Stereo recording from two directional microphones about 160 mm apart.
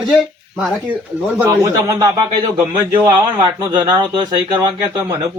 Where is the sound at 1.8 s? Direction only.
20° right (ahead or behind).